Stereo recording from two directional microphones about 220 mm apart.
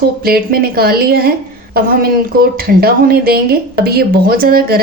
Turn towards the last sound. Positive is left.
turn(degrees=-45)  # may be behind; listen again after turning